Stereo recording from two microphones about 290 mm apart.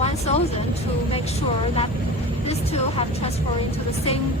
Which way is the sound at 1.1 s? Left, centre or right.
Centre.